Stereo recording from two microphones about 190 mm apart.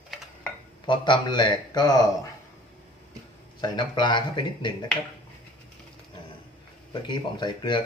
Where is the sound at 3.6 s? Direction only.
25° left (ahead or behind).